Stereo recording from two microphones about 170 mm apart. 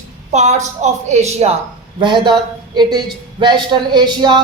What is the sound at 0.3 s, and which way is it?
Speech, 40° right (ahead or behind).